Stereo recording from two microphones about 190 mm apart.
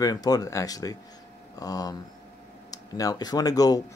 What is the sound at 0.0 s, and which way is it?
Speech, 20° left (ahead or behind).